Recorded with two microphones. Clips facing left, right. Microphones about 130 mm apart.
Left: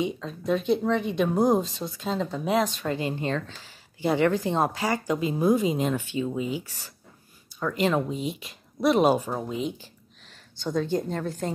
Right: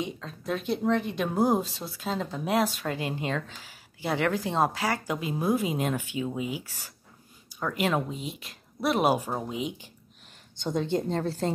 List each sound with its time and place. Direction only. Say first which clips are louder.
0.0 s a woman's voice: left 5 dB; centre (ahead or behind); by 11.5 s 30° right (ahead or behind)